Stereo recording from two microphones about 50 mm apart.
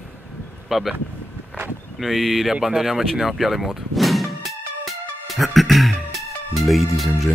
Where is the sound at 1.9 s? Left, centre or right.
Centre.